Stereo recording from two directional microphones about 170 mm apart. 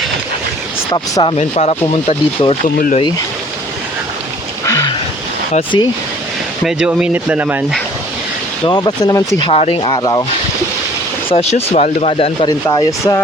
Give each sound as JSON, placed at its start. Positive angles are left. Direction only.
{"t": 0.9, "sound": "speech", "side_deg": 30}
{"t": 2.6, "sound": "speech", "side_deg": 50}
{"t": 4.6, "sound": "a sound", "side_deg": 20}
{"t": 5.7, "sound": "speech", "side_deg": 25}
{"t": 6.7, "sound": "speech", "side_deg": -5}
{"t": 8.6, "sound": "speech", "side_deg": 25}
{"t": 11.3, "sound": "speech", "side_deg": 35}
{"t": 12.6, "sound": "speech", "side_deg": 20}